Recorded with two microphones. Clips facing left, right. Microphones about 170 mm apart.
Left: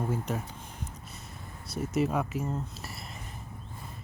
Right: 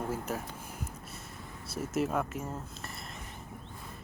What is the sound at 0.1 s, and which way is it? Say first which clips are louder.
Speech: left 2 dB; 5° right (ahead or behind).